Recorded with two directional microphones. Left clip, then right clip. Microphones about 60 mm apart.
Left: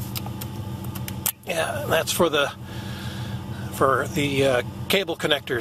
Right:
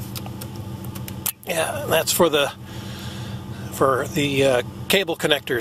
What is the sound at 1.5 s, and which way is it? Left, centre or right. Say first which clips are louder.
Speech: right 2 dB; right.